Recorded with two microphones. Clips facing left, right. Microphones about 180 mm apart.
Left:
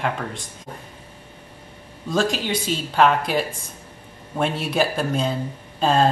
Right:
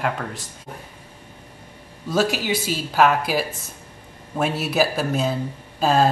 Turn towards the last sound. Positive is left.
turn(degrees=-5)  # may be behind; listen again after turning